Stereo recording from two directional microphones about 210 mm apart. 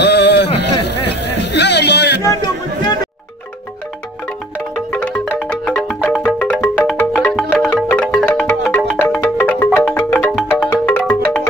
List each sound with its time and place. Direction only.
0.0 s a sound: 55° left (ahead or behind)
0.6 s music: 55° left (ahead or behind)
4.9 s music: 5° left (ahead or behind)